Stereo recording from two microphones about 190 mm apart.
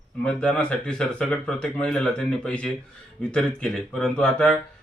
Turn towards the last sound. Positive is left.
turn(degrees=5)  # may be behind; listen again after turning